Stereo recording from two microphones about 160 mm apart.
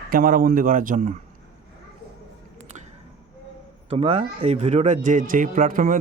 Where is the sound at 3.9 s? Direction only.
40° right (ahead or behind).